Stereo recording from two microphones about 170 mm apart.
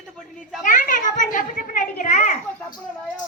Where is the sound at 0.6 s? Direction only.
50° left (ahead or behind).